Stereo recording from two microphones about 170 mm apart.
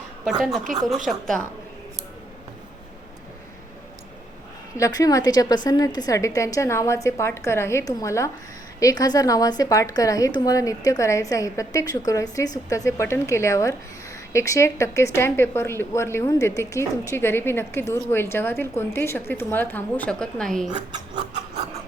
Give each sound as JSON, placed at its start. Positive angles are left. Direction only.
{"t": 0.3, "sound": "a woman's voice", "side_deg": 0}
{"t": 4.8, "sound": "a woman's voice", "side_deg": 20}